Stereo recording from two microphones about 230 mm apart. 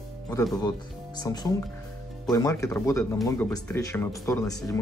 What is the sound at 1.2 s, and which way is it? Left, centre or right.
Speech, centre.